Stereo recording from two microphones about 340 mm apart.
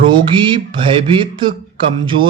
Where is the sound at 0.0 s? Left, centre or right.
Centre.